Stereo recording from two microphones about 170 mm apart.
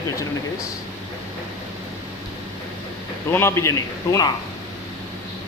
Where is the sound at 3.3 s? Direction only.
15° left (ahead or behind).